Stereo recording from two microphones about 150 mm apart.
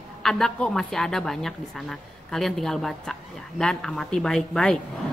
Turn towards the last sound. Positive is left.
turn(degrees=5)  # may be behind; listen again after turning